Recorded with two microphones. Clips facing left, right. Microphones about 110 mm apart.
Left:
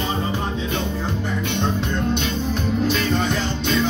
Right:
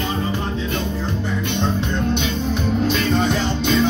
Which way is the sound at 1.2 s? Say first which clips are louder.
Right 1 dB; 5° left (ahead or behind).